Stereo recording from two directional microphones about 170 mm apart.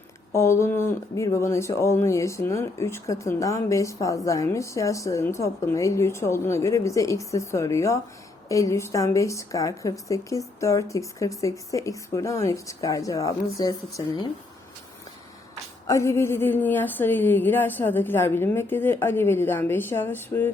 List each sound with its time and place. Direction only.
0.3 s a woman's voice: 15° left (ahead or behind)
15.9 s speech: 15° left (ahead or behind)